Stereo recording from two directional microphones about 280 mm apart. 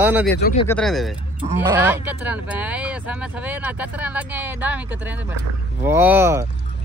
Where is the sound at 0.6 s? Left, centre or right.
Centre.